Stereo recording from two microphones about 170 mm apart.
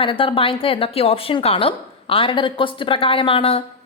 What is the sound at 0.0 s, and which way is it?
A woman's voice, 30° left (ahead or behind).